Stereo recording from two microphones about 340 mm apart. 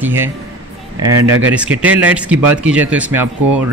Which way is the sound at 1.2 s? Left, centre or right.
Right.